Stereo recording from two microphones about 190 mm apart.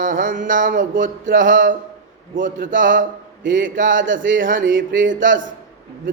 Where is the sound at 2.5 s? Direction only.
45° right (ahead or behind).